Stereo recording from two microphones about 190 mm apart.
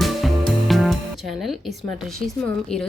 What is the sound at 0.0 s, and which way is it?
Music, centre (ahead or behind).